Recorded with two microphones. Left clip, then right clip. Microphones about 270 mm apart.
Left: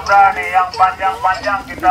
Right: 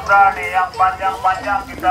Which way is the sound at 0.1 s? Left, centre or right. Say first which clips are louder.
Left 2 dB; left.